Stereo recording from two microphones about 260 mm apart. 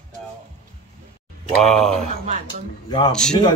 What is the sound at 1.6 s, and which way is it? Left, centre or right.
Speech, centre.